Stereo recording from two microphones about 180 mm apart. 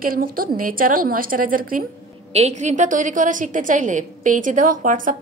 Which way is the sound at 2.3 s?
35° right (ahead or behind).